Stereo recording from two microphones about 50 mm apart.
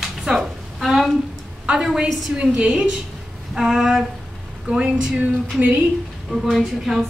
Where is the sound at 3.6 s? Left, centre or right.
Centre.